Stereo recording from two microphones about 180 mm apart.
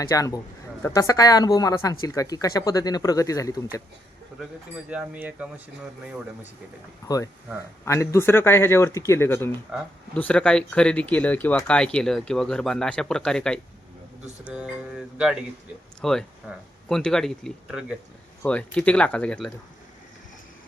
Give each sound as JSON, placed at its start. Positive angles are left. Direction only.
{"t": 0.0, "sound": "speech", "side_deg": 20}
{"t": 4.9, "sound": "speech", "side_deg": -5}
{"t": 7.9, "sound": "speech", "side_deg": 15}
{"t": 16.4, "sound": "speech", "side_deg": -10}
{"t": 16.9, "sound": "speech", "side_deg": 5}
{"t": 18.4, "sound": "speech", "side_deg": 5}